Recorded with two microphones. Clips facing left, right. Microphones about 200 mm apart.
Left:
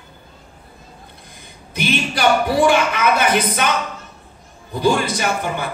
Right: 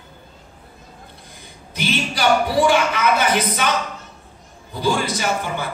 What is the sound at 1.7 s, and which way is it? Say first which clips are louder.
Speech: left 2 dB; 55° left (ahead or behind).